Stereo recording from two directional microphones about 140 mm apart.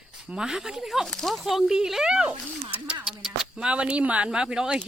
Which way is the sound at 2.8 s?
5° right (ahead or behind).